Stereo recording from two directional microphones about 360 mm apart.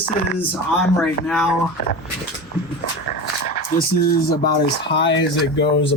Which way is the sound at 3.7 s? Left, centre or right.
Left.